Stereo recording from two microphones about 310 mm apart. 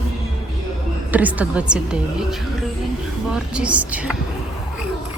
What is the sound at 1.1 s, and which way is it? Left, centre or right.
A woman's voice, centre.